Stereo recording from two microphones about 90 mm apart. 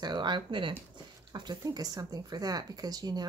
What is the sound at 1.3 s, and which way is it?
Speech, 50° right (ahead or behind).